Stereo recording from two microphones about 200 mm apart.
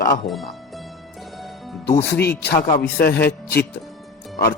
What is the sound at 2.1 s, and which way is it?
Speech, 55° left (ahead or behind).